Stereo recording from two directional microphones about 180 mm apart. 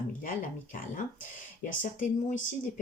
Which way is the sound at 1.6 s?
45° left (ahead or behind).